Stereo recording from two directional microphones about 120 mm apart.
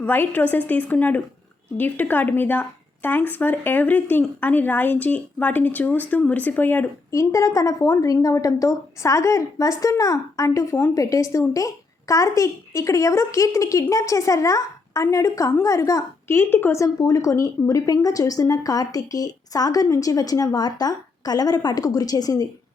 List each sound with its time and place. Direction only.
0.0 s speech: 15° left (ahead or behind)
7.1 s speech: 25° left (ahead or behind)